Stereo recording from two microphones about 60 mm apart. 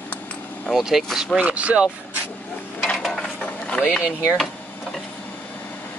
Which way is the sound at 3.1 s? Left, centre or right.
Centre.